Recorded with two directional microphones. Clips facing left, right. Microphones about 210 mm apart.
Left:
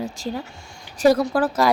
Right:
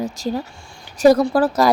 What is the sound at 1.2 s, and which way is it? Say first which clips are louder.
Speech: right 4 dB; 35° right (ahead or behind).